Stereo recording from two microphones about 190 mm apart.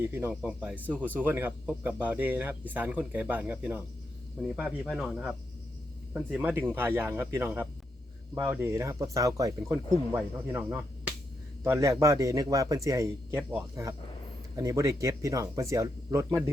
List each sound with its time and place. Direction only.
0.0 s speech: 10° right (ahead or behind)
0.9 s speech: 10° left (ahead or behind)
1.2 s speech: 10° right (ahead or behind)